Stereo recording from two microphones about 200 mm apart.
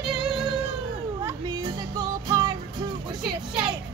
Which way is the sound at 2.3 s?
20° right (ahead or behind).